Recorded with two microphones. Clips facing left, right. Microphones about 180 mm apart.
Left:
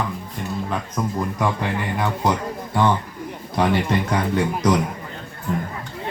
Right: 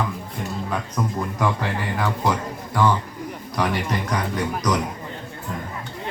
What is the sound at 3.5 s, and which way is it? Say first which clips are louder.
Speech: left 4 dB; 25° left (ahead or behind).